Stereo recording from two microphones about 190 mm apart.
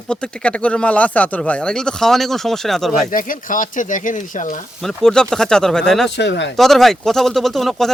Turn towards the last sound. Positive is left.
turn(degrees=0)  # may be behind; listen again after turning